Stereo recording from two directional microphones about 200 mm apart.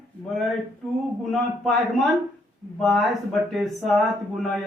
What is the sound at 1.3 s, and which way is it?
Speech, centre (ahead or behind).